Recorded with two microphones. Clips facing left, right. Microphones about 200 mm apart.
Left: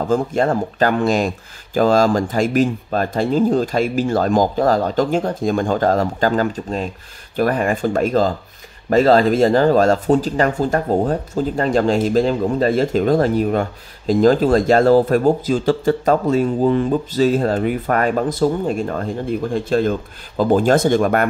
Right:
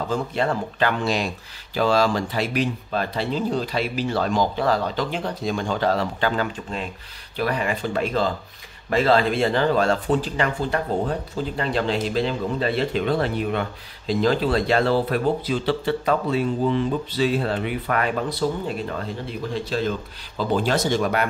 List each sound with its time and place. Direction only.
0.1 s speech: 45° left (ahead or behind)